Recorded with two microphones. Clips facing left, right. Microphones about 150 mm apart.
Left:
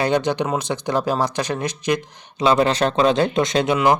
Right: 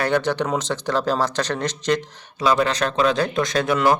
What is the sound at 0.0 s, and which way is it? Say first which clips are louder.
Speech: left 1 dB; 15° left (ahead or behind).